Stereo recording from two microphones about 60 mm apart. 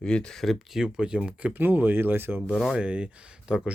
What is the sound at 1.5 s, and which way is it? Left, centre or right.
Speech, right.